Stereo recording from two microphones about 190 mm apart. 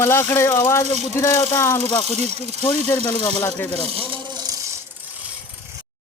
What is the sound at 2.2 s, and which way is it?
Speech, 35° right (ahead or behind).